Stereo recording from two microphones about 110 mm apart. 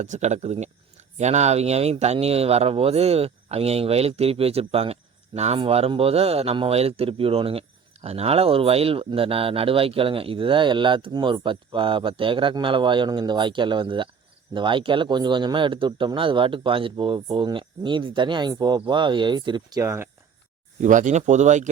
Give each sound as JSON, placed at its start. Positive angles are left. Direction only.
{"t": 0.0, "sound": "speech", "side_deg": -90}
{"t": 19.8, "sound": "speech", "side_deg": -25}
{"t": 20.8, "sound": "speech", "side_deg": -90}